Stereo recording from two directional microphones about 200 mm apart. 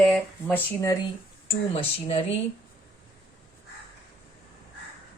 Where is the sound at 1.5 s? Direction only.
25° left (ahead or behind).